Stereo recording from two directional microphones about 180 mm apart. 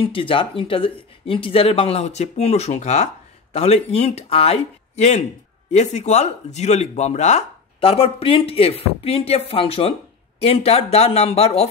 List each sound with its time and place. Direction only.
0.0 s speech: 30° left (ahead or behind)